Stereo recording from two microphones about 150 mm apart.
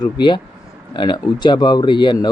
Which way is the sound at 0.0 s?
30° left (ahead or behind).